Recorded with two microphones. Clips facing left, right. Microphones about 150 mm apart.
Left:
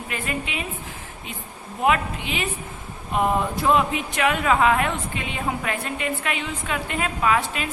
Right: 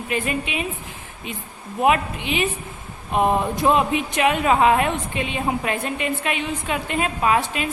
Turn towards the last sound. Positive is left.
turn(degrees=-20)  # may be behind; listen again after turning